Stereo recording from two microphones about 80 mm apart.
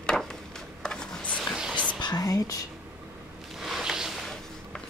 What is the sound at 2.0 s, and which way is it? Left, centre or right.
Whispering, left.